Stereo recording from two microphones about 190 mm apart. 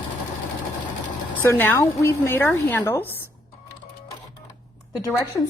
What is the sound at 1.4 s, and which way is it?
Speech, 10° left (ahead or behind).